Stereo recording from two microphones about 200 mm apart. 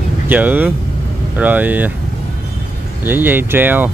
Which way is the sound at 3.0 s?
10° right (ahead or behind).